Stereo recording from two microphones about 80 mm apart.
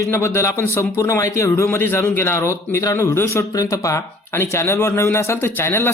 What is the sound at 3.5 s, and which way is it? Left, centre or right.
A man's voice, left.